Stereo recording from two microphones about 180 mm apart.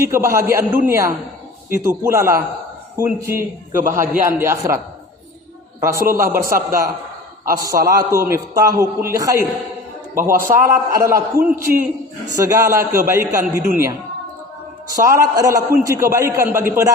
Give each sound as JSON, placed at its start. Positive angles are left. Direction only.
{"t": 0.0, "sound": "a man's voice", "side_deg": -15}
{"t": 5.8, "sound": "a man's voice", "side_deg": -15}
{"t": 11.5, "sound": "a man's voice", "side_deg": -50}
{"t": 12.3, "sound": "a man's voice", "side_deg": -20}
{"t": 14.9, "sound": "a man's voice", "side_deg": -15}